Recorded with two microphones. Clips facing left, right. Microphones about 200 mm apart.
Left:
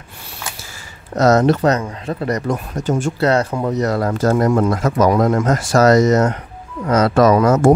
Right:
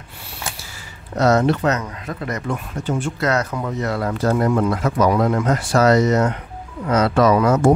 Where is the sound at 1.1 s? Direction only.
45° left (ahead or behind).